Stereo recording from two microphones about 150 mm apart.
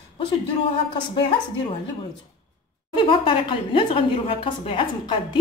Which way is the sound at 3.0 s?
35° left (ahead or behind).